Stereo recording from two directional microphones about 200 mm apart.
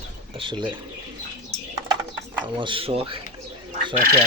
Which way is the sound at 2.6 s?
25° right (ahead or behind).